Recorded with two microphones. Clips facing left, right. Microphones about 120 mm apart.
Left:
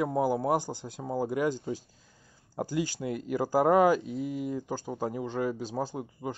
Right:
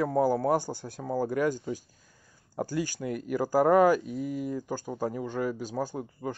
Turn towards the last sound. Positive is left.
turn(degrees=20)  # may be behind; listen again after turning